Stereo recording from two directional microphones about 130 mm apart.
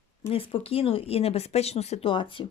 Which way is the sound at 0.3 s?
45° left (ahead or behind).